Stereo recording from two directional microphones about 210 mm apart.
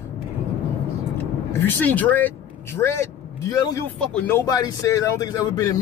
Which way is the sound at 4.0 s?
5° left (ahead or behind).